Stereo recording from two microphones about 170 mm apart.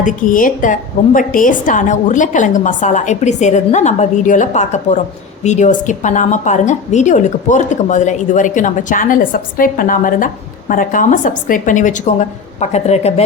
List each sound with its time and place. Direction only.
0.0 s a woman's voice: 50° left (ahead or behind)